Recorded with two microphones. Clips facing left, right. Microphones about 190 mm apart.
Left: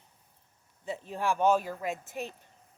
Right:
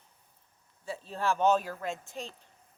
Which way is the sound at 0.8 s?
20° left (ahead or behind).